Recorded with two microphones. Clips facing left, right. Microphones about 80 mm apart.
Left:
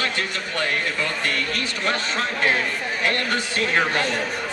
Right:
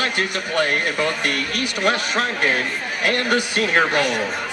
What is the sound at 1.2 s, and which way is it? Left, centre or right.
Speech, right.